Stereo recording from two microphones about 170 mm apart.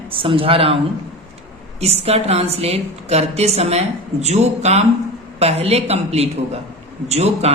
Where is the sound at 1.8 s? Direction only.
35° right (ahead or behind).